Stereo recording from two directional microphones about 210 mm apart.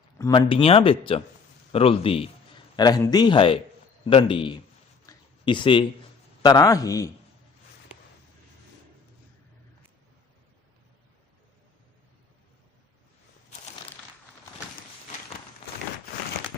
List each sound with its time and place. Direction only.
0.2 s speech: 20° left (ahead or behind)
5.0 s a sound: 20° left (ahead or behind)
6.4 s speech: 20° left (ahead or behind)